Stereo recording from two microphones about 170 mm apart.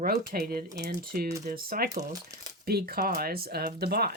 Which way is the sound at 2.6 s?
65° right (ahead or behind).